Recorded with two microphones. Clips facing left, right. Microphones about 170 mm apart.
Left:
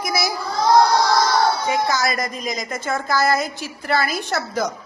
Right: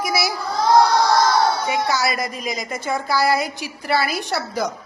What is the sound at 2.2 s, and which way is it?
A woman's voice, 10° right (ahead or behind).